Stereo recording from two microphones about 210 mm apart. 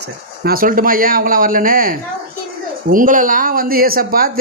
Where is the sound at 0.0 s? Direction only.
45° right (ahead or behind).